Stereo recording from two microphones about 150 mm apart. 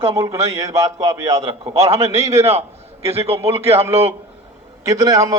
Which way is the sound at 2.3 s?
45° right (ahead or behind).